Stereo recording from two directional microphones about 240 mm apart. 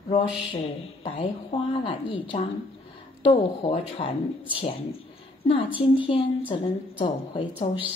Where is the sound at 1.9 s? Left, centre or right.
Left.